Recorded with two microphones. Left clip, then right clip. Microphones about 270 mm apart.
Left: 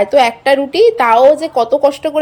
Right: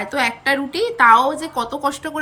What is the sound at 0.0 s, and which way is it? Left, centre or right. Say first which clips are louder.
A woman's voice: left 9 dB; centre.